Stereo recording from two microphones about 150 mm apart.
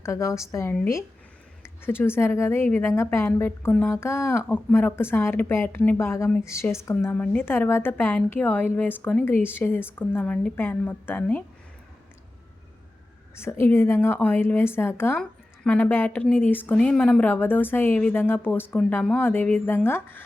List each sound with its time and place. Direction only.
0.0 s a woman's voice: 20° left (ahead or behind)
13.3 s a woman's voice: 15° left (ahead or behind)